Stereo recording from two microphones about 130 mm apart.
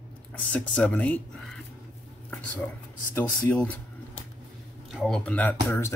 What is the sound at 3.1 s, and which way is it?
Speech, 15° left (ahead or behind).